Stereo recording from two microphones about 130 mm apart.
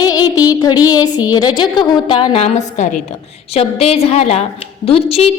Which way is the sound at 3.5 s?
50° left (ahead or behind).